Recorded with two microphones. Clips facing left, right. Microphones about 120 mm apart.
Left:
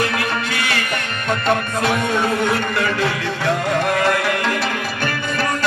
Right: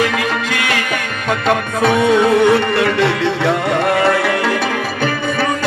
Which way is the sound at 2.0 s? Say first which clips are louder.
Right 8 dB; 75° right (ahead or behind).